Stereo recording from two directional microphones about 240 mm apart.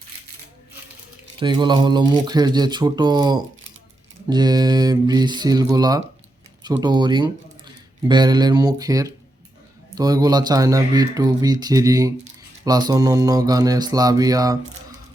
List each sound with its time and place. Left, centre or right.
1.4 s speech: centre